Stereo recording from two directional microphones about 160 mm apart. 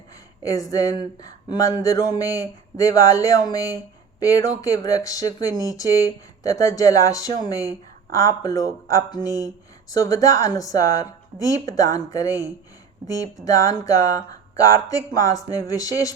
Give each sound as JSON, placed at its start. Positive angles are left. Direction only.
{"t": 0.4, "sound": "speech", "side_deg": 20}